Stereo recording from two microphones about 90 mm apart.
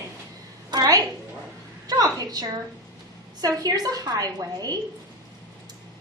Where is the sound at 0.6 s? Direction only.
45° right (ahead or behind).